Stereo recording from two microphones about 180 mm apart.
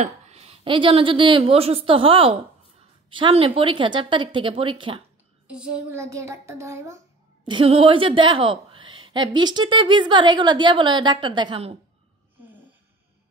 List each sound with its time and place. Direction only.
0.0 s a woman's voice: 35° right (ahead or behind)
5.5 s a child's voice: 5° right (ahead or behind)
5.9 s a child's voice: 15° right (ahead or behind)
7.4 s a woman's voice: 30° right (ahead or behind)